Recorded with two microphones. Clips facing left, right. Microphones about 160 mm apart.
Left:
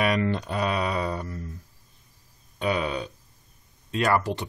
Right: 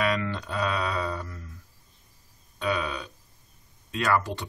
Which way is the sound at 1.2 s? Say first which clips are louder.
Left 6 dB; 35° left (ahead or behind).